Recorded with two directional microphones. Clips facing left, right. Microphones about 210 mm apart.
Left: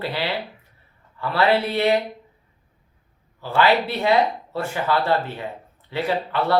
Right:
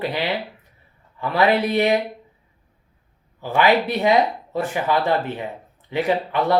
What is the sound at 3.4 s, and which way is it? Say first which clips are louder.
Speech: right 1 dB; 15° right (ahead or behind).